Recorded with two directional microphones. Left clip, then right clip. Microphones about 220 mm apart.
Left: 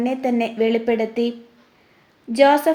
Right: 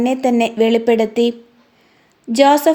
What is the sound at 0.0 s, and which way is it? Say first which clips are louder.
A woman's voice: right 6 dB; 35° right (ahead or behind).